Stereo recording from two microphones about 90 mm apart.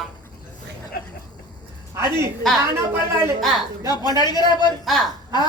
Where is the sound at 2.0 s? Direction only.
30° right (ahead or behind).